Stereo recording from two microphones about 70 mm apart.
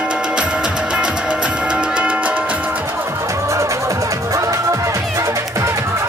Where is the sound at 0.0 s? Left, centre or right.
Centre.